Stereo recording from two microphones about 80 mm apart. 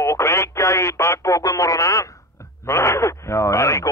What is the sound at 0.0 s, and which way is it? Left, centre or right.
Radio, left.